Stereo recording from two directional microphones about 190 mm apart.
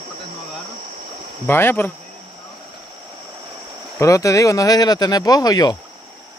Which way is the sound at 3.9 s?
15° left (ahead or behind).